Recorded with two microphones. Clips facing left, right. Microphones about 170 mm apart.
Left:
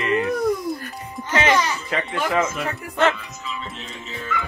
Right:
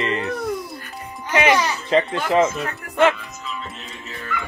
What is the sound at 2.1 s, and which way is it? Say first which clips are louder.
Speech: right 3 dB; 25° right (ahead or behind).